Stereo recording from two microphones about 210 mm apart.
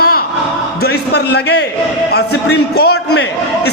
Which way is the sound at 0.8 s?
50° left (ahead or behind).